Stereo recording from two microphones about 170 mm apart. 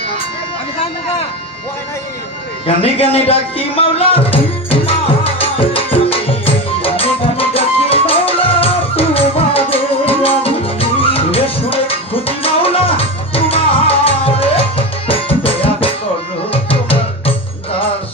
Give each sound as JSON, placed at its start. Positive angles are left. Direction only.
{"t": 2.6, "sound": "music", "side_deg": 35}